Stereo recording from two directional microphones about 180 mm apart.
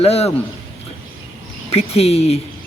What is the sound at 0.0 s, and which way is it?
Speech, 35° left (ahead or behind).